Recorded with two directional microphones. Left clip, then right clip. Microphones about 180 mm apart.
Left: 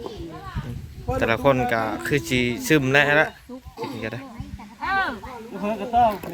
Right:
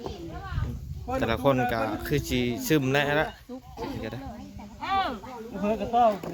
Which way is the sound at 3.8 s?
Centre (ahead or behind).